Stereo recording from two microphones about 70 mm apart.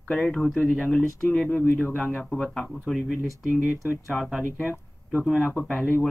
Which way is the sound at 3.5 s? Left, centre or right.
Right.